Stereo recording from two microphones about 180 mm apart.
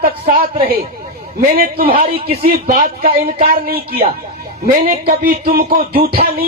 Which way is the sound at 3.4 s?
55° right (ahead or behind).